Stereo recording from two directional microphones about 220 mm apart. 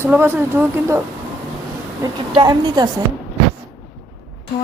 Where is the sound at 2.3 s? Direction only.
20° right (ahead or behind).